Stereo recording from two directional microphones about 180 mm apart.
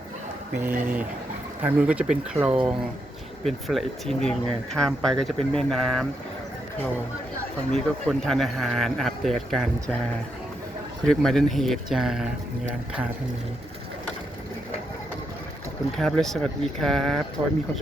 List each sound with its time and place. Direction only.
0.6 s speech: 10° right (ahead or behind)
7.7 s speech: 5° left (ahead or behind)
11.0 s speech: centre (ahead or behind)
16.0 s speech: centre (ahead or behind)
17.4 s speech: 30° right (ahead or behind)